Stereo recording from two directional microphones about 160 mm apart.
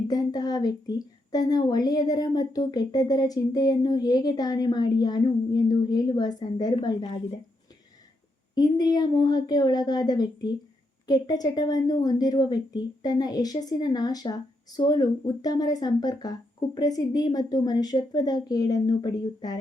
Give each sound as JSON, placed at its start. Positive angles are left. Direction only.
{"t": 0.1, "sound": "a woman's voice", "side_deg": 25}
{"t": 8.5, "sound": "a woman's voice", "side_deg": 25}